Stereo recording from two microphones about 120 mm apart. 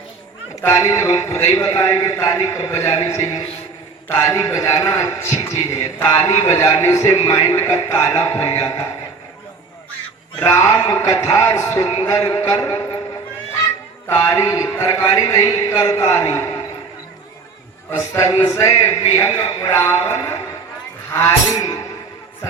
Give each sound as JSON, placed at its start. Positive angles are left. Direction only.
{"t": 0.6, "sound": "a man's voice", "side_deg": 25}
{"t": 10.4, "sound": "a man's voice", "side_deg": 25}
{"t": 14.1, "sound": "a man's voice", "side_deg": 25}
{"t": 17.9, "sound": "a man's voice", "side_deg": 25}